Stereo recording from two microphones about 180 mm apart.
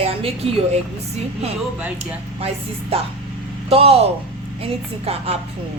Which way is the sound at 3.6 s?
30° right (ahead or behind).